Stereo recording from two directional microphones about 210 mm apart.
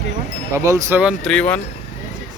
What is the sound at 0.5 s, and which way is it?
Speech, 15° right (ahead or behind).